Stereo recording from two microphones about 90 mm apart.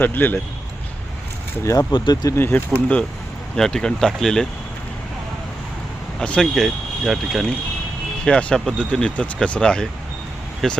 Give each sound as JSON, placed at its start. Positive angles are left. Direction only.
{"t": 0.0, "sound": "speech", "side_deg": 20}
{"t": 1.9, "sound": "speech", "side_deg": 60}
{"t": 2.3, "sound": "speech", "side_deg": 25}
{"t": 3.5, "sound": "speech", "side_deg": 10}
{"t": 6.1, "sound": "speech", "side_deg": 10}
{"t": 6.4, "sound": "speech", "side_deg": 0}
{"t": 8.2, "sound": "speech", "side_deg": 10}